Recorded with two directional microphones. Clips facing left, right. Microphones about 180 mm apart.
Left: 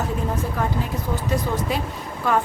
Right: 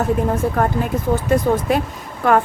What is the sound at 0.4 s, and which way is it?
A woman's voice, 60° right (ahead or behind).